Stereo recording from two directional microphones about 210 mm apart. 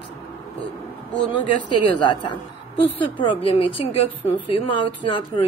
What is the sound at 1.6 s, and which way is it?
Speech, 20° left (ahead or behind).